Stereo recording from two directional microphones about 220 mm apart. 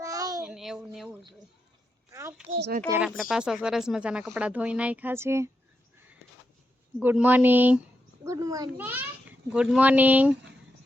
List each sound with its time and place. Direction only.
0.0 s child singing: 15° right (ahead or behind)
0.4 s a sound: centre (ahead or behind)
2.6 s speech: 50° right (ahead or behind)
2.9 s speech: 5° right (ahead or behind)
7.0 s a child's voice: 10° right (ahead or behind)